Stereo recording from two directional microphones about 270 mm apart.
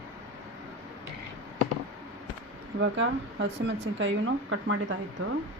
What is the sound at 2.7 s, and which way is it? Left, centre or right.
Speech, right.